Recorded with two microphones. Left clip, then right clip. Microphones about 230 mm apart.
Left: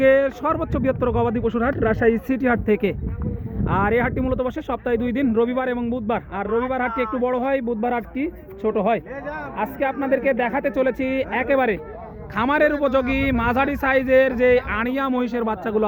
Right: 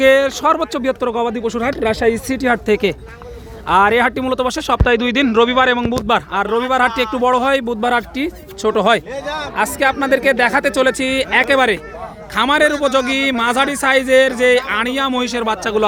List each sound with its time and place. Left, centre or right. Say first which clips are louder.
0.0 s speech: right 5 dB; centre